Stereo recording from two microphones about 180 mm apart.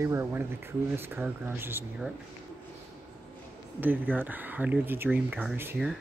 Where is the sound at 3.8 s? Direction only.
10° right (ahead or behind).